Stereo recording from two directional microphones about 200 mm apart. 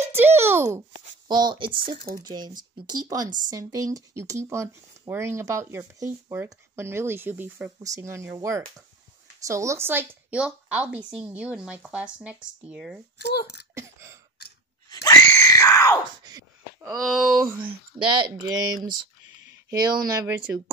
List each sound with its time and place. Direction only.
0.0 s a sound: 10° right (ahead or behind)
1.8 s speech: 45° right (ahead or behind)
2.1 s speech: 20° right (ahead or behind); by 13.0 s 5° right (ahead or behind)
13.4 s speech: 55° left (ahead or behind)
13.7 s a sound: 15° right (ahead or behind)
14.9 s screaming: 15° left (ahead or behind)
16.3 s wail: 15° right (ahead or behind)
17.6 s speech: 20° right (ahead or behind)